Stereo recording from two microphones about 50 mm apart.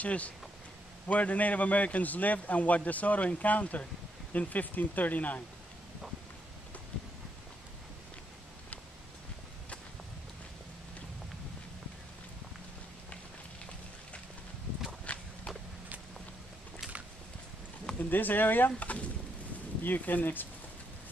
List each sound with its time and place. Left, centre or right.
0.0 s a man's voice: left
15.1 s walk: left
17.9 s a man's voice: left